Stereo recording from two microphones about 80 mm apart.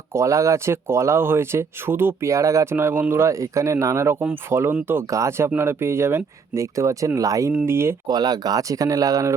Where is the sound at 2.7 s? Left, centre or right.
Right.